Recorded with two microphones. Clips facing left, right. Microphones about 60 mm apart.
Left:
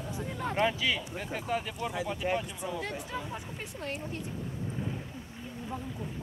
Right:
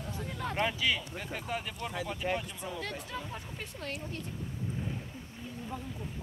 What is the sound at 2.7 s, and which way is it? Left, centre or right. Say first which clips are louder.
Speech: left 2 dB; centre.